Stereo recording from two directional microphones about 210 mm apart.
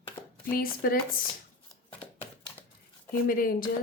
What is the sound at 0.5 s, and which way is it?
Speech, 45° left (ahead or behind).